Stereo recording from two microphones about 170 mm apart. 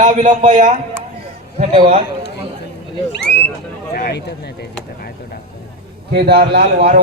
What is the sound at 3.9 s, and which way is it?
Speech, 75° left (ahead or behind).